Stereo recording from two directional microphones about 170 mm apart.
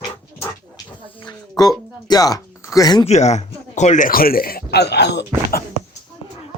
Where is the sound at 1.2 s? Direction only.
25° left (ahead or behind).